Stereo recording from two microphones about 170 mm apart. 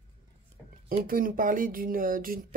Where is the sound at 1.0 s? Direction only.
55° right (ahead or behind).